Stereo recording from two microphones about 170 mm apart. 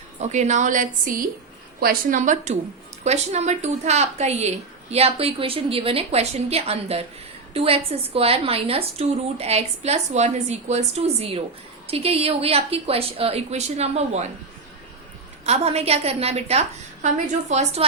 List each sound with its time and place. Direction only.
0.2 s a woman's voice: 45° right (ahead or behind)
15.4 s a woman's voice: 40° right (ahead or behind)